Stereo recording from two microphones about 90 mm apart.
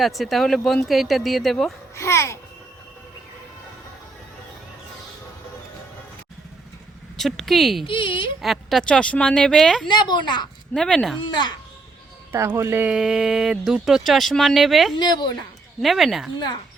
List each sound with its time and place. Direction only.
0.0 s speech: centre (ahead or behind)
2.0 s babbling: 30° left (ahead or behind)
7.2 s speech: centre (ahead or behind)
7.9 s speech: 70° left (ahead or behind)
8.4 s speech: centre (ahead or behind)
8.8 s speech: 10° left (ahead or behind)
9.9 s a woman's voice: 55° left (ahead or behind)
10.8 s speech: 5° left (ahead or behind)
11.2 s a woman's voice: 55° left (ahead or behind)
12.5 s speech: 35° right (ahead or behind)
12.8 s speech: 10° right (ahead or behind)
14.9 s a woman's voice: 50° left (ahead or behind)
15.8 s speech: centre (ahead or behind)